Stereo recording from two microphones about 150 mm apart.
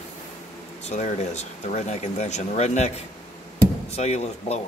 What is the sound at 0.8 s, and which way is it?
Speech, 50° left (ahead or behind).